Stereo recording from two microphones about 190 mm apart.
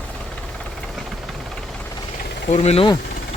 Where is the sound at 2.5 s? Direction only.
35° left (ahead or behind).